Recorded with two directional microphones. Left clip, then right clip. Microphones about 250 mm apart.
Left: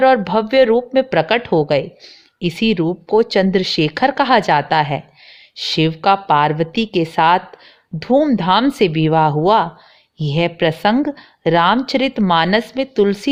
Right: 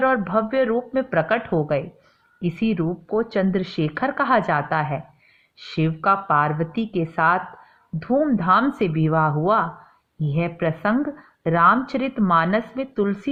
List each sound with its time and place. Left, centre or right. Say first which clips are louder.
0.0 s a woman's voice: left 7 dB; left